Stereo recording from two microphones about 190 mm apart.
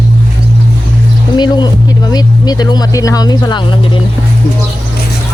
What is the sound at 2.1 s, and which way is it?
Speech, 20° left (ahead or behind).